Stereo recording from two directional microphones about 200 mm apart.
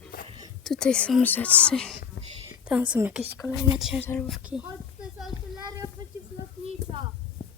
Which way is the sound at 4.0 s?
10° left (ahead or behind).